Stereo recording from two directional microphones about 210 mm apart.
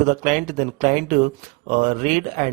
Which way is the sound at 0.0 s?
35° right (ahead or behind).